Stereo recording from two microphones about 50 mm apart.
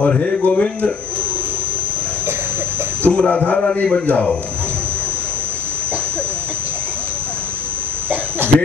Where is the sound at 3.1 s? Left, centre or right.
Centre.